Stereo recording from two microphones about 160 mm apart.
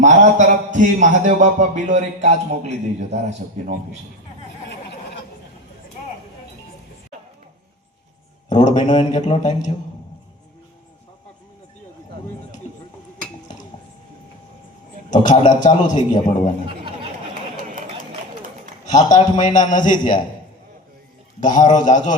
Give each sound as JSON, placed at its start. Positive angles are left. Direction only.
{"t": 0.0, "sound": "a man's voice", "side_deg": -50}
{"t": 8.4, "sound": "a man's voice", "side_deg": 50}
{"t": 15.1, "sound": "a man's voice", "side_deg": 50}
{"t": 16.6, "sound": "a sound", "side_deg": -35}
{"t": 17.6, "sound": "a sound", "side_deg": -55}
{"t": 18.9, "sound": "a man's voice", "side_deg": 50}
{"t": 21.4, "sound": "a man's voice", "side_deg": 50}